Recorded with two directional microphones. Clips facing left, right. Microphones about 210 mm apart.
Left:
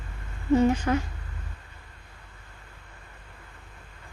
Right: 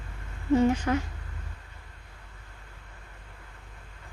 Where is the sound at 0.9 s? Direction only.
45° left (ahead or behind).